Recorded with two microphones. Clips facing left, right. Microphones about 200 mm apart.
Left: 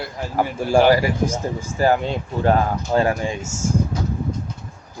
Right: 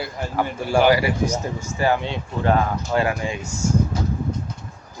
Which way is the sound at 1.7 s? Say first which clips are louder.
Left 3 dB; 40° left (ahead or behind).